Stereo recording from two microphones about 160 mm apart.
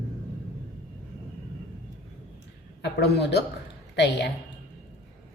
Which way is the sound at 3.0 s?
90° left.